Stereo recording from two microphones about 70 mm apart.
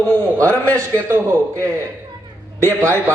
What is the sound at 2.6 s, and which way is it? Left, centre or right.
Speech, right.